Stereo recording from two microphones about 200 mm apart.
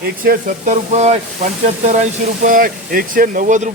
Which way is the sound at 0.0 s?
45° right (ahead or behind).